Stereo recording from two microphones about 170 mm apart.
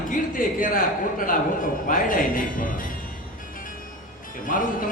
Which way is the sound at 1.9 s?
55° left (ahead or behind).